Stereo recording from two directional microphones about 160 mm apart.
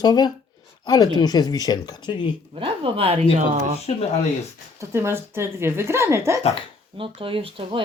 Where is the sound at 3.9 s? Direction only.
45° left (ahead or behind).